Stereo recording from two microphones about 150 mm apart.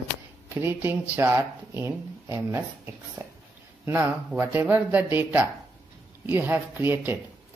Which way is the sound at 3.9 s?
15° right (ahead or behind).